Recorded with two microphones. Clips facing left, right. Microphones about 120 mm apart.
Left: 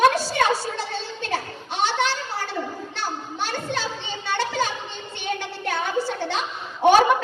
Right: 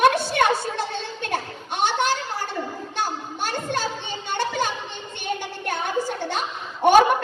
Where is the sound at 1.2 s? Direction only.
50° right (ahead or behind).